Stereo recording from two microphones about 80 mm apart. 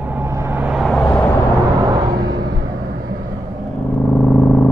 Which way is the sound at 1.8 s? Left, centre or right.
Right.